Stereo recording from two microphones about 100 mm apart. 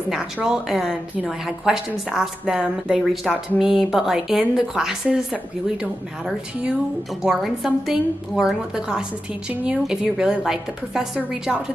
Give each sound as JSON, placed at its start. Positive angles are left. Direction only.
{"t": 0.1, "sound": "a woman's voice", "side_deg": -5}